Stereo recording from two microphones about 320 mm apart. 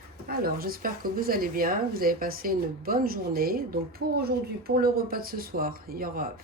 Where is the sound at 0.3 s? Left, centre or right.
Right.